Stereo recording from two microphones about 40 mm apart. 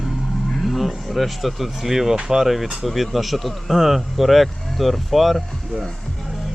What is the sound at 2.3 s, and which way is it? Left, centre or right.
Speech, centre.